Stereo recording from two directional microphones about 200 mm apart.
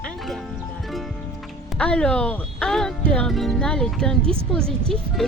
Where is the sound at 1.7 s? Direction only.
5° left (ahead or behind).